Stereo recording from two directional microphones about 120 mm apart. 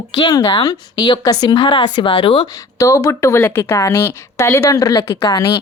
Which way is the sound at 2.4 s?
25° left (ahead or behind).